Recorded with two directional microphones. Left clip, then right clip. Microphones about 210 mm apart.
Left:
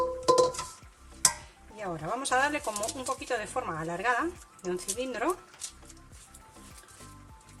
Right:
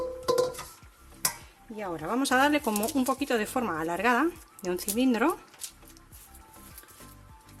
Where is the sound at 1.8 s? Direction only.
40° right (ahead or behind).